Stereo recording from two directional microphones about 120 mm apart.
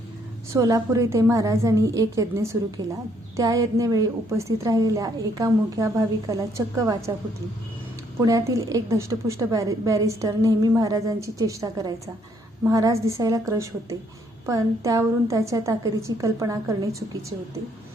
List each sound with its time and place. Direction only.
0.5 s a woman's voice: 25° right (ahead or behind)
8.2 s a woman's voice: 30° right (ahead or behind)